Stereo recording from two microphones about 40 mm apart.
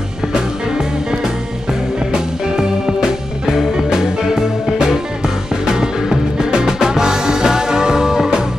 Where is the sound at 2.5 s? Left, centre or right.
Centre.